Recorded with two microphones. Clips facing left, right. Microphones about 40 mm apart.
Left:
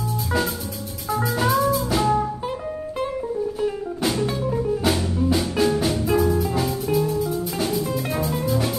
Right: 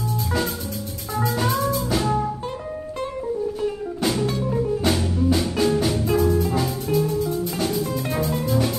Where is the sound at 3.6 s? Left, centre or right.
Centre.